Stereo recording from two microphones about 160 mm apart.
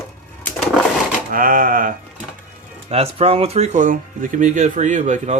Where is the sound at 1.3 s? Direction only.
60° right (ahead or behind).